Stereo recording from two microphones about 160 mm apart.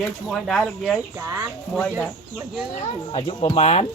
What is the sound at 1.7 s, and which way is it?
Speech, 10° left (ahead or behind).